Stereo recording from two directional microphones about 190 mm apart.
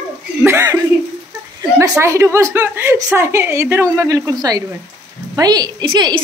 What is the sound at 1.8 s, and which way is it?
A woman's voice, 15° right (ahead or behind).